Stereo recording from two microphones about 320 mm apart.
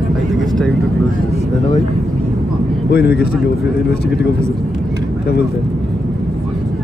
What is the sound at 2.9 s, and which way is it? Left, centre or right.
Speech, left.